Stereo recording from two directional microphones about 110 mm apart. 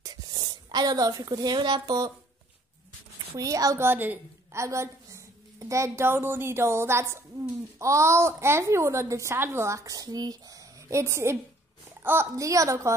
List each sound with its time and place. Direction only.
0.0 s a woman's voice: 35° right (ahead or behind)
3.3 s a woman's voice: 30° right (ahead or behind)